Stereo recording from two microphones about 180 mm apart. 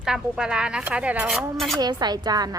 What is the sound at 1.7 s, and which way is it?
Speech, 25° right (ahead or behind).